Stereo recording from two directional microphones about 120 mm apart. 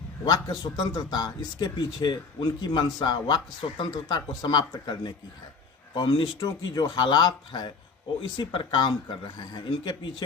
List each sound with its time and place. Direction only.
0.3 s speech: 35° left (ahead or behind)